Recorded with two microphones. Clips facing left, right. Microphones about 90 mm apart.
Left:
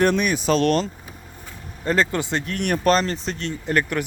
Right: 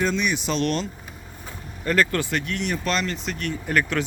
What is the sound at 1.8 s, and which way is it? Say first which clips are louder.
Speech: left 1 dB; 25° left (ahead or behind).